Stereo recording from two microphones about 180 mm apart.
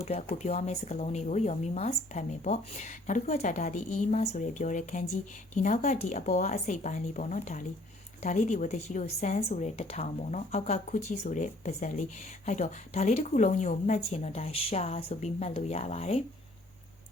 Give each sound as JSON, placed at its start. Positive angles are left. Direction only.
{"t": 0.0, "sound": "speech", "side_deg": 35}